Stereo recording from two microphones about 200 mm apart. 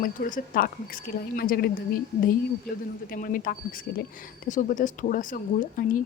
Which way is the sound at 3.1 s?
45° left (ahead or behind).